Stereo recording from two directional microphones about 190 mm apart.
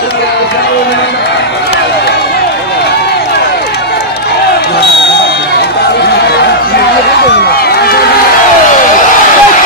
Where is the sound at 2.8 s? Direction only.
60° left (ahead or behind).